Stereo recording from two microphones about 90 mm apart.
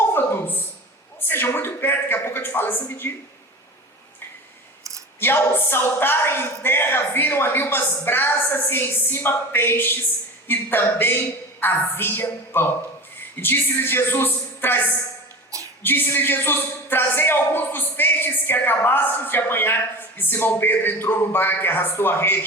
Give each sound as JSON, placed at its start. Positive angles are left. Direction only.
{"t": 0.1, "sound": "a sound", "side_deg": 25}
{"t": 1.2, "sound": "speech", "side_deg": 25}
{"t": 5.2, "sound": "speech", "side_deg": 25}